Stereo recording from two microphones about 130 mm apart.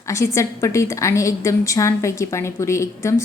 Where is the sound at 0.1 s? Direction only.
20° left (ahead or behind).